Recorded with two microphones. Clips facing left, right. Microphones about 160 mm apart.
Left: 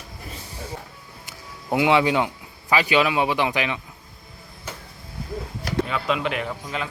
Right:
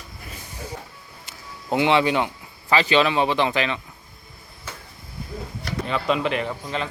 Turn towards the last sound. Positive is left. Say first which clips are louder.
# right 2 dB
turn(degrees=5)  # may be behind; listen again after turning